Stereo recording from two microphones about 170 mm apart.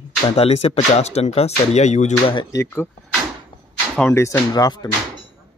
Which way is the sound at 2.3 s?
30° left (ahead or behind).